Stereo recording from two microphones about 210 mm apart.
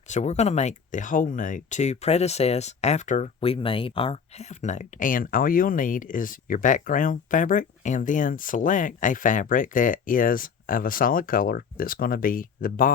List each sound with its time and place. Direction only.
0.1 s speech: 30° left (ahead or behind)